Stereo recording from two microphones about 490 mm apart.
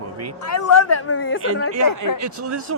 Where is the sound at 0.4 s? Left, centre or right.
Left.